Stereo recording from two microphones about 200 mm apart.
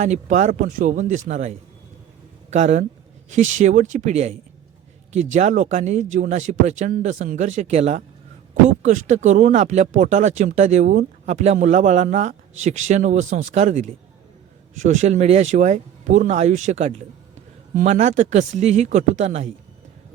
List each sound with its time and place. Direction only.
0.0 s speech: 35° right (ahead or behind)